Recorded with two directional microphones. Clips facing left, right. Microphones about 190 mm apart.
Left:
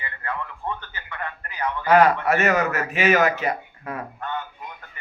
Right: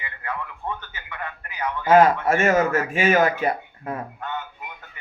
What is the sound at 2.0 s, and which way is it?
Speech, 25° right (ahead or behind).